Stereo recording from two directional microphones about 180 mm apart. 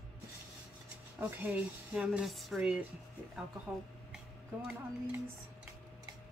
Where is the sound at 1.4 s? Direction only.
5° right (ahead or behind).